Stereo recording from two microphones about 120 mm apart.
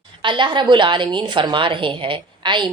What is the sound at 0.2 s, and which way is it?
A woman's voice, 40° right (ahead or behind).